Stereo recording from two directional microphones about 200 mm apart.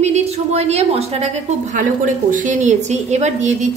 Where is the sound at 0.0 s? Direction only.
35° right (ahead or behind).